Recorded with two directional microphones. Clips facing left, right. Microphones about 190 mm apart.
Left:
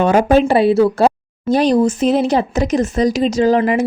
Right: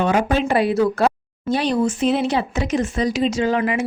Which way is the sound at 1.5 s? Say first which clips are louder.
Left 6 dB; 40° left (ahead or behind).